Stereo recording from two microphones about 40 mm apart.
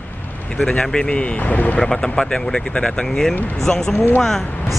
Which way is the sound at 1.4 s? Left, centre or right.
Left.